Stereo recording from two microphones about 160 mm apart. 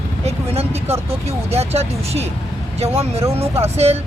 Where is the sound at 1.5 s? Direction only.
40° right (ahead or behind).